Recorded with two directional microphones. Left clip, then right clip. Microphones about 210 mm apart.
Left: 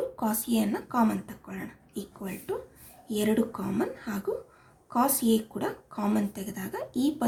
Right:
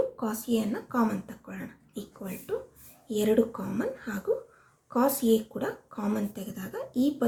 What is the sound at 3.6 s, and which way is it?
Speech, 45° left (ahead or behind).